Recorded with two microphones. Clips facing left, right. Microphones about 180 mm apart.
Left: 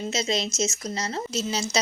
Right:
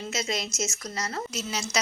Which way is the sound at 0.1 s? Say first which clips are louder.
Left 3 dB; 25° left (ahead or behind).